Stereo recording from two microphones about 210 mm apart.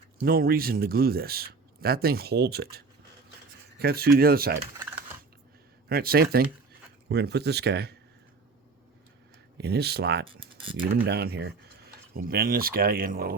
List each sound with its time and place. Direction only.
0.2 s speech: 45° right (ahead or behind)
5.9 s speech: 45° right (ahead or behind)
9.6 s speech: 50° right (ahead or behind)